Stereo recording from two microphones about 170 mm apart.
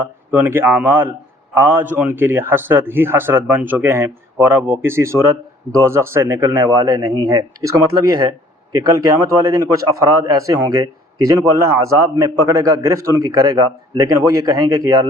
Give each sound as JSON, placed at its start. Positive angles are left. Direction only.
{"t": 0.3, "sound": "a man's voice", "side_deg": -10}